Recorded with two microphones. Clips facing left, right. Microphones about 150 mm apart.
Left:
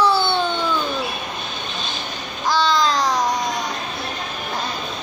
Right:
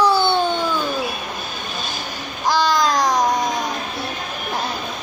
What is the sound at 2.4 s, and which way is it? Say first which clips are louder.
Babbling: right 1 dB; 45° right (ahead or behind).